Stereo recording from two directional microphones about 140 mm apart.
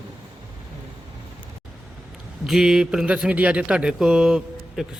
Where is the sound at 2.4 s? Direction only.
Centre (ahead or behind).